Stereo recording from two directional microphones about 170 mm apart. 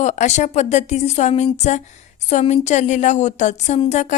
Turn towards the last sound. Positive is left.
turn(degrees=45)  # may be behind; listen again after turning